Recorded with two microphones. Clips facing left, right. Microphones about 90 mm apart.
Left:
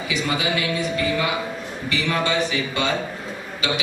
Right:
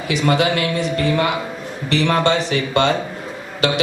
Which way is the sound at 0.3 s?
55° right (ahead or behind).